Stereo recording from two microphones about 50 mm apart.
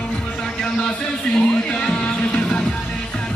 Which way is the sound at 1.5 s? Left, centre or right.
Left.